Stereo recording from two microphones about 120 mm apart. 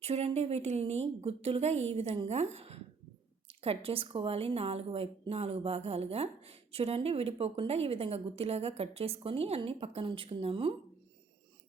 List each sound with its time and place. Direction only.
0.0 s a woman's voice: 60° right (ahead or behind)